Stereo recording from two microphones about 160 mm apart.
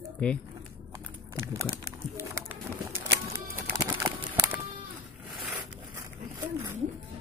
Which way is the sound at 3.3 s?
15° right (ahead or behind).